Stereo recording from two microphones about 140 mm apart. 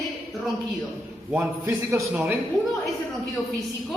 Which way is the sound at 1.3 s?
20° right (ahead or behind).